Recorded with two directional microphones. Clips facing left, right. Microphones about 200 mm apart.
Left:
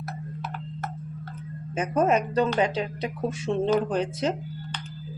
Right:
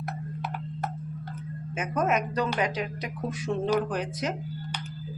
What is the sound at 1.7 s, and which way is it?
A woman's voice, 30° left (ahead or behind).